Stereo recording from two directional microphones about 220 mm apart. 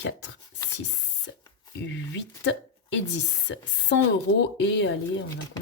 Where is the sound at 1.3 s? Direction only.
55° left (ahead or behind).